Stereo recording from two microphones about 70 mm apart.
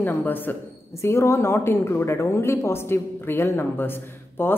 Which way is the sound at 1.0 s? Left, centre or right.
Left.